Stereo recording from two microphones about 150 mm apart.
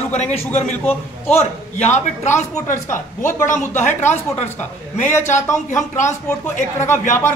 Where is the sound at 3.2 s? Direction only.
15° left (ahead or behind).